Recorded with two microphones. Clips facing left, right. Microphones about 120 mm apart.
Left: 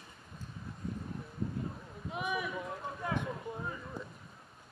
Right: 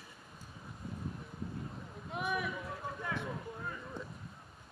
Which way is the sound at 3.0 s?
20° left (ahead or behind).